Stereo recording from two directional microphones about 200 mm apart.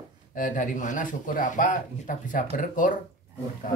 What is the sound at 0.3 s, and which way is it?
Speech, 40° left (ahead or behind).